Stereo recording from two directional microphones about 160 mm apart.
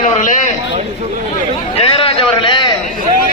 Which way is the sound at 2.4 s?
30° left (ahead or behind).